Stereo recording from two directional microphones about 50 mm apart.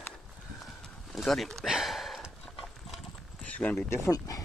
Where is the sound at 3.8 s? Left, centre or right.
Left.